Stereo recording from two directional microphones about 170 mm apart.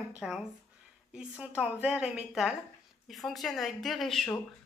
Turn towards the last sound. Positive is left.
turn(degrees=0)  # may be behind; listen again after turning